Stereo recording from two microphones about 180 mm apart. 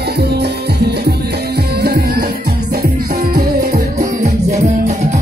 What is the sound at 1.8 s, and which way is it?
Music, 60° right (ahead or behind).